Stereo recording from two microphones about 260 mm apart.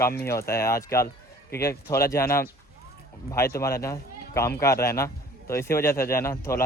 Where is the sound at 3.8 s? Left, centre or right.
Centre.